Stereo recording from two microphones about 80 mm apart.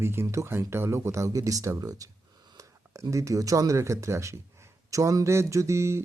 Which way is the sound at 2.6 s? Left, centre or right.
Right.